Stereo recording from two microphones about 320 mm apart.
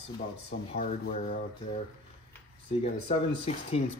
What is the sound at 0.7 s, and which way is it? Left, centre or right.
Speech, left.